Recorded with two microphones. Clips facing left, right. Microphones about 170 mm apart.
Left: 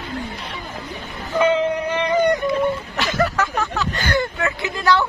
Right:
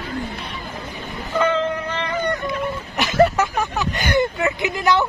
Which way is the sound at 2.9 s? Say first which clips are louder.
Right 4 dB; 20° right (ahead or behind).